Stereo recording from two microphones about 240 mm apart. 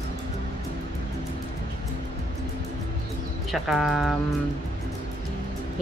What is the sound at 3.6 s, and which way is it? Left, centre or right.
Speech, centre.